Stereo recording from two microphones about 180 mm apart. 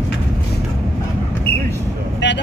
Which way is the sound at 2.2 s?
75° left (ahead or behind).